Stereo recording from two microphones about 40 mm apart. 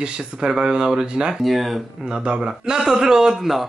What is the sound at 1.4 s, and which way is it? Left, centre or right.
Speech, centre.